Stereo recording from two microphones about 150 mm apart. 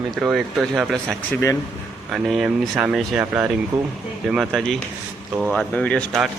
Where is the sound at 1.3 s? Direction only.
20° left (ahead or behind).